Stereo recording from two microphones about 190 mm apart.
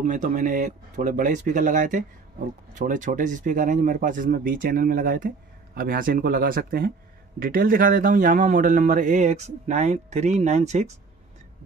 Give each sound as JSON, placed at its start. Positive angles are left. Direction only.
{"t": 0.0, "sound": "speech", "side_deg": -40}